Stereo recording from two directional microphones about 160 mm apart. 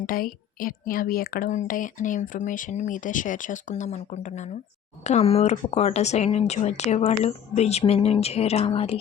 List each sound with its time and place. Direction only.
0.0 s a woman's voice: 60° left (ahead or behind); by 9.0 s 40° left (ahead or behind)